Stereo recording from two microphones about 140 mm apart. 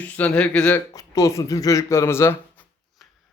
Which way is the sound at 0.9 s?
25° left (ahead or behind).